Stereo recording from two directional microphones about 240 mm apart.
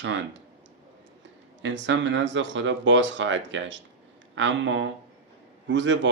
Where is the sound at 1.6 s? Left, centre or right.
Right.